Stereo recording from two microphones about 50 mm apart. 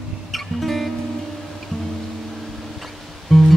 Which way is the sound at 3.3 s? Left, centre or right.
Centre.